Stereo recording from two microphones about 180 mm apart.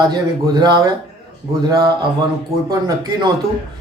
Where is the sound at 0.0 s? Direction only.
20° right (ahead or behind).